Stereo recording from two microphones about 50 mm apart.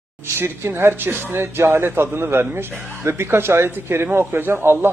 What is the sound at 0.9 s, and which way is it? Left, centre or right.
Speech, right.